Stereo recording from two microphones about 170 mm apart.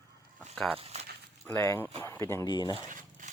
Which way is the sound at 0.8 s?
40° right (ahead or behind).